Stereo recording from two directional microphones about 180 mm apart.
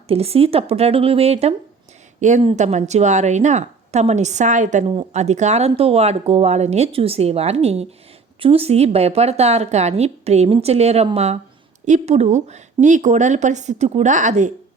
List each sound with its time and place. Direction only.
0.1 s speech: 35° right (ahead or behind)